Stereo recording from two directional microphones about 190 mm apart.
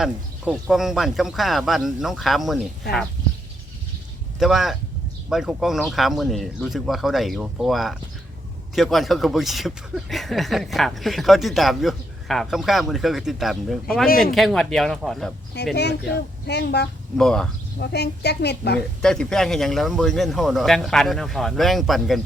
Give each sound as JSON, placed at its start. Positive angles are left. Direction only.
{"t": 0.0, "sound": "speech", "side_deg": 0}
{"t": 4.4, "sound": "speech", "side_deg": 0}
{"t": 15.7, "sound": "a woman's voice", "side_deg": 60}
{"t": 17.2, "sound": "speech", "side_deg": 5}
{"t": 17.7, "sound": "a woman's voice", "side_deg": 60}
{"t": 19.0, "sound": "speech", "side_deg": 5}